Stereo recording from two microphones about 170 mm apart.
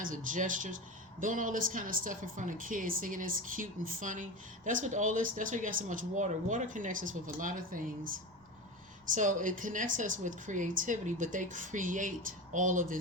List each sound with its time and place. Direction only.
0.0 s speech: 50° right (ahead or behind)
9.1 s speech: 50° right (ahead or behind)